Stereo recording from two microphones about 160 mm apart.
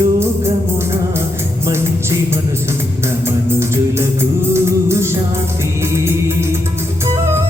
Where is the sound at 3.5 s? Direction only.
15° right (ahead or behind).